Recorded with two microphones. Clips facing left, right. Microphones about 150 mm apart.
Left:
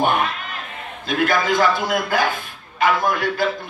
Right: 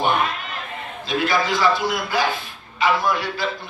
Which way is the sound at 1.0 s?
50° left (ahead or behind).